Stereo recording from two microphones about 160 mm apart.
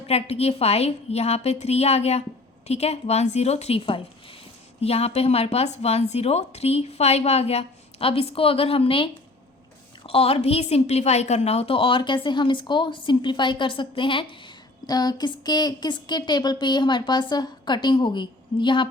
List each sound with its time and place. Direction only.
0.1 s a woman's voice: 40° left (ahead or behind)